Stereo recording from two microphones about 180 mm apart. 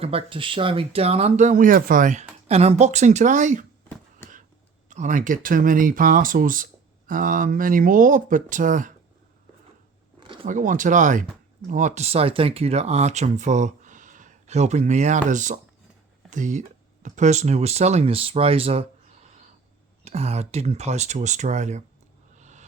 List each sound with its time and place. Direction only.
0.0 s speech: 35° right (ahead or behind)
4.9 s speech: 45° right (ahead or behind)
10.2 s a sound: 30° right (ahead or behind)
10.4 s speech: 45° right (ahead or behind)
22.4 s music: 40° right (ahead or behind)